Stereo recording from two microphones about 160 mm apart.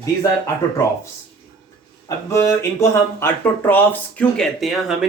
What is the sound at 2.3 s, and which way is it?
Speech, 20° left (ahead or behind).